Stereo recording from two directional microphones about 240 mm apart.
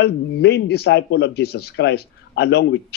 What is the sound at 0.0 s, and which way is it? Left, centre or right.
Speech, left.